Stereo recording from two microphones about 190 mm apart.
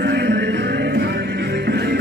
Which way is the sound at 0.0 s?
65° right (ahead or behind).